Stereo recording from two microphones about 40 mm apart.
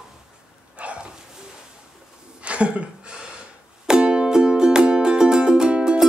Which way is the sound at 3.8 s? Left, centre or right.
Right.